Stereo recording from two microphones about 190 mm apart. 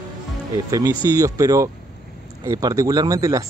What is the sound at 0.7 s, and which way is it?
Speech, 15° right (ahead or behind).